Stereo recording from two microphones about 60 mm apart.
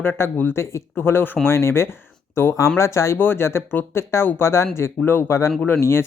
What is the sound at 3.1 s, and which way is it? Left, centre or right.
Speech, left.